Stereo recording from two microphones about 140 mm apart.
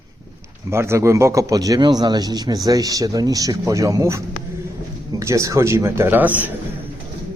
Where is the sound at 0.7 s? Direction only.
20° right (ahead or behind).